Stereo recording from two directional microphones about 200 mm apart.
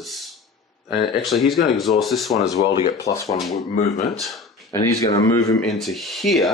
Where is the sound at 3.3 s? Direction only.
35° left (ahead or behind).